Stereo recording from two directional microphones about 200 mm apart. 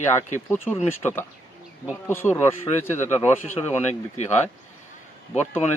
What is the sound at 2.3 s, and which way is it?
Speech, 15° left (ahead or behind).